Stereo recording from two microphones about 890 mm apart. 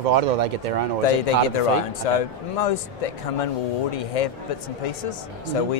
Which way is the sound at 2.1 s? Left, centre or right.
Left.